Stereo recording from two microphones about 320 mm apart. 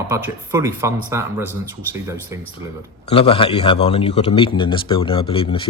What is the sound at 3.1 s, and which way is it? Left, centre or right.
Speech, centre.